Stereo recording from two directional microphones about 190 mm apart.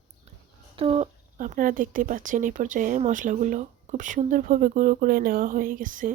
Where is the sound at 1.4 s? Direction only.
45° right (ahead or behind).